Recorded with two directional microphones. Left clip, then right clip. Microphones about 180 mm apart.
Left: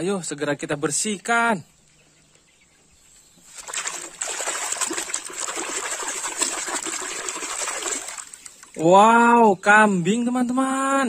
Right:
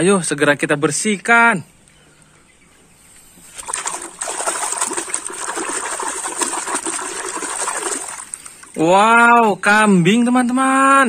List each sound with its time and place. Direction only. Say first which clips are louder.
0.0 s speech: right 11 dB; 5° left (ahead or behind)
3.6 s a sound: right 5 dB; 35° left (ahead or behind)
5.7 s water: right 5 dB; 40° left (ahead or behind)
8.7 s speech: right 3 dB; 10° left (ahead or behind)